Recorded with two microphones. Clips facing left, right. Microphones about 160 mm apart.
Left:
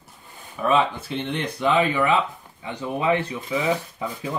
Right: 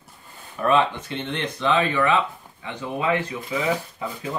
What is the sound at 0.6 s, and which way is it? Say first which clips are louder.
Speech: right 1 dB; 5° left (ahead or behind).